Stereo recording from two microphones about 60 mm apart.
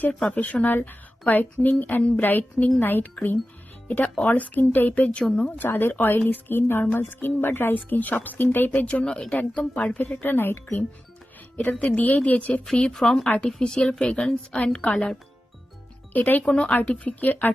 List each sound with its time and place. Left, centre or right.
0.2 s a woman's voice: left
5.6 s speech: left
9.0 s speech: centre
9.3 s a woman's voice: left
10.1 s speech: left
11.5 s a woman's voice: left
12.6 s speech: centre
13.2 s a woman's voice: left
13.6 s speech: centre
14.6 s speech: left
16.1 s a woman's voice: left
16.5 s a woman's voice: centre